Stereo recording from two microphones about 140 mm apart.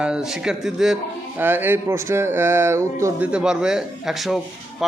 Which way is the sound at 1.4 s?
15° right (ahead or behind).